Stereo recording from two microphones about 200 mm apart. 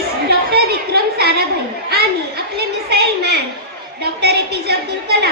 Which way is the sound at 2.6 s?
55° right (ahead or behind).